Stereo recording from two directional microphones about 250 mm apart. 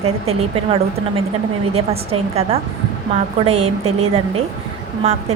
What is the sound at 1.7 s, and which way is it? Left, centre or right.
A woman's voice, right.